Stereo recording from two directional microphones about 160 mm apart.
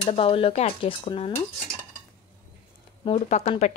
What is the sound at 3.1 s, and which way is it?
Speech, 45° left (ahead or behind).